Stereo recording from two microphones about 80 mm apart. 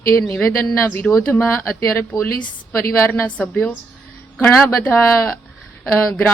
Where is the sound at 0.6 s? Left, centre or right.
Left.